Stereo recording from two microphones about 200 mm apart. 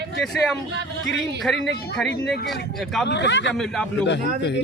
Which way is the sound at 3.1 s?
60° left (ahead or behind).